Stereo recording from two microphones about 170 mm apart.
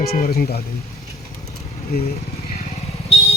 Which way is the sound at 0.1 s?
65° left (ahead or behind).